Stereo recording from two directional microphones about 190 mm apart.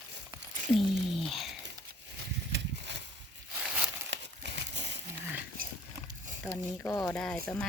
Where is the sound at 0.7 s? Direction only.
Centre (ahead or behind).